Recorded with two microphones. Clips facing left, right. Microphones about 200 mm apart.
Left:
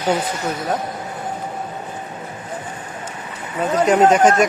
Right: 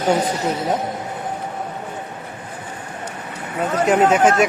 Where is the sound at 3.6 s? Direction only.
5° right (ahead or behind).